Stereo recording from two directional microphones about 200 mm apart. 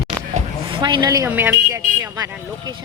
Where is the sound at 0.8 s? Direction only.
20° right (ahead or behind).